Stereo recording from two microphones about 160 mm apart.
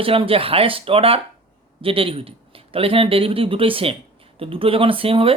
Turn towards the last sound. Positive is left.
turn(degrees=-35)  # may be behind; listen again after turning